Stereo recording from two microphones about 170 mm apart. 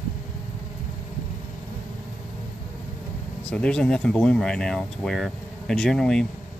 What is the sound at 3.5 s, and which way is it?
Speech, 5° left (ahead or behind).